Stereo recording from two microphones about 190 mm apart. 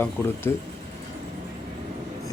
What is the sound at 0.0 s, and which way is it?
Speech, 10° left (ahead or behind).